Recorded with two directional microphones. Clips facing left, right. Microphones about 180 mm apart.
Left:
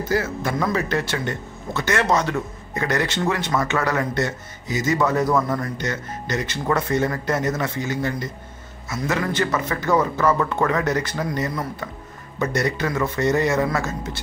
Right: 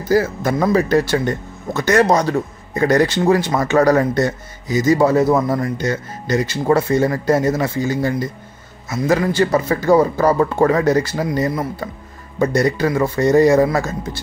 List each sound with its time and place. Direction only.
0.1 s speech: 40° right (ahead or behind)